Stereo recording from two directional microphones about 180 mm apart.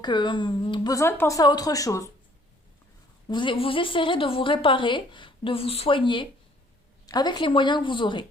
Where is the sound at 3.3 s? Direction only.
25° left (ahead or behind).